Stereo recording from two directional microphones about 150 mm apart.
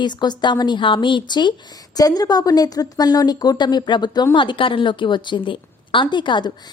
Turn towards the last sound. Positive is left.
turn(degrees=30)  # may be behind; listen again after turning